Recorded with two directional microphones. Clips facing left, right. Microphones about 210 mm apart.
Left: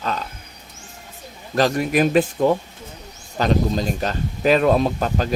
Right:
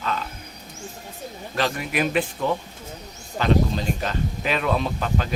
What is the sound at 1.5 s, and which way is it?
Speech, 40° left (ahead or behind).